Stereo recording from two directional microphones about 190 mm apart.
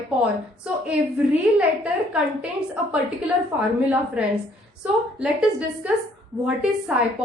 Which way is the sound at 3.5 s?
5° right (ahead or behind).